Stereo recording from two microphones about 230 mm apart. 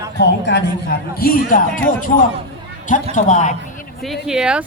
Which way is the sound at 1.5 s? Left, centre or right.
Left.